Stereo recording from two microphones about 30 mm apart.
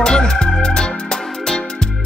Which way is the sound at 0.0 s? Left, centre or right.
Left.